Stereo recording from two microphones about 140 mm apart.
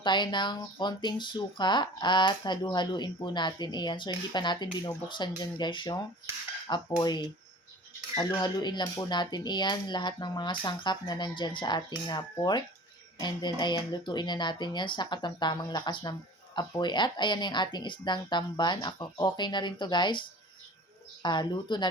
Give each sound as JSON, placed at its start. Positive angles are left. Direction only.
{"t": 0.0, "sound": "speech", "side_deg": 35}
{"t": 7.0, "sound": "speech", "side_deg": 30}
{"t": 8.4, "sound": "speech", "side_deg": 30}